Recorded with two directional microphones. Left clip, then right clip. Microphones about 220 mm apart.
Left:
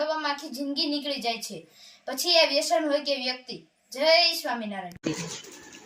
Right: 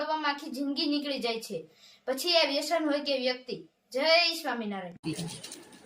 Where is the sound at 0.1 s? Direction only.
20° right (ahead or behind).